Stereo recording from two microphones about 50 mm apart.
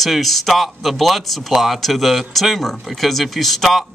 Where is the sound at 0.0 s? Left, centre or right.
Centre.